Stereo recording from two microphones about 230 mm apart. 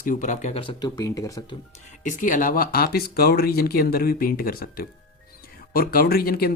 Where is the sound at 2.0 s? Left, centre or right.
Left.